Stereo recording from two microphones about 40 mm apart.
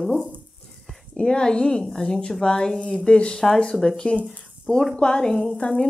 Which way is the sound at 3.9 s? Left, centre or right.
Left.